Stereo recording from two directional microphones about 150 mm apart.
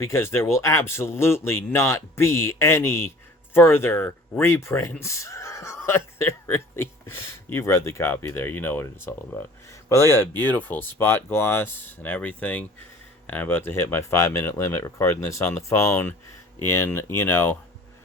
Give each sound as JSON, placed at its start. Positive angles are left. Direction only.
{"t": 0.0, "sound": "speech", "side_deg": 15}